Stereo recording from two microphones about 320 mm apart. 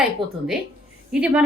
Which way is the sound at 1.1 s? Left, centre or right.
Centre.